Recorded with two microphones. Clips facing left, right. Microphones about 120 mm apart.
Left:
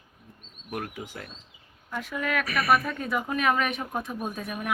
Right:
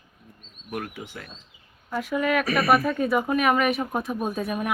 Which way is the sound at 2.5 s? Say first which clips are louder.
Right 1 dB; 30° right (ahead or behind).